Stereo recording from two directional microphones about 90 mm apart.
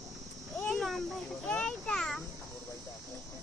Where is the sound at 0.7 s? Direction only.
Centre (ahead or behind).